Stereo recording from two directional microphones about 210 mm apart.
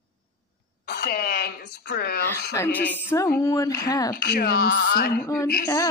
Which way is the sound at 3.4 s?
15° left (ahead or behind).